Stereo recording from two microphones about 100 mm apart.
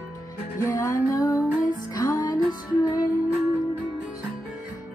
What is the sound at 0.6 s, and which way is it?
Music, 30° left (ahead or behind).